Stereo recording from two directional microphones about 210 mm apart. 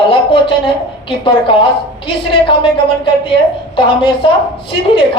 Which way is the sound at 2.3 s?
25° left (ahead or behind).